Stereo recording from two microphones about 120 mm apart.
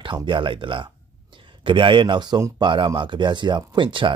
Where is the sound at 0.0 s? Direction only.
45° right (ahead or behind).